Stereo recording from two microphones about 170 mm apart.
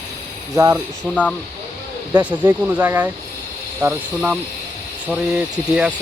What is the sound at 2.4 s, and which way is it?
Speech, 10° right (ahead or behind).